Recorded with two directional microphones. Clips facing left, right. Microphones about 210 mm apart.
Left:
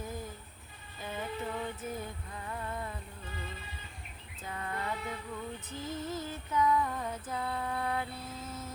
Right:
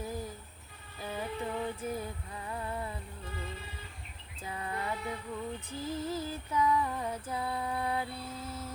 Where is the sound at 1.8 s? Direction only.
10° right (ahead or behind).